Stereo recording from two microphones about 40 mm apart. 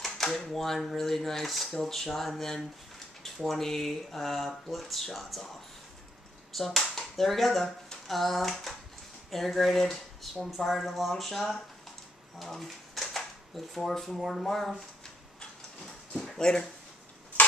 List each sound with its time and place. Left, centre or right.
0.0 s a sound: centre
0.5 s speech: centre
6.5 s speech: centre
12.4 s a sound: centre
13.7 s speech: centre
16.1 s speech: centre